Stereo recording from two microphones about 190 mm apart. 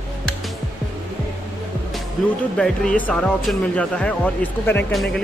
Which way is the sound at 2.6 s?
5° left (ahead or behind).